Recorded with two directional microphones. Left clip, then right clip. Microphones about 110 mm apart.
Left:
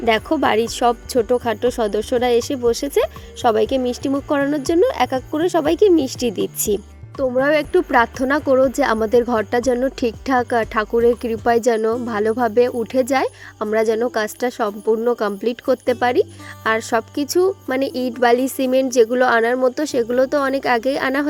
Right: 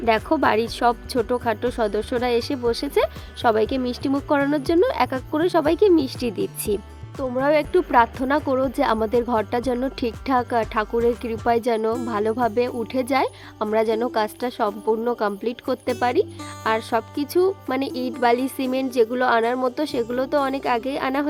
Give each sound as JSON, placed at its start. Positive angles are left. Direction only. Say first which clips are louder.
{"t": 0.0, "sound": "speech", "louder": "left 2 dB", "side_deg": 30}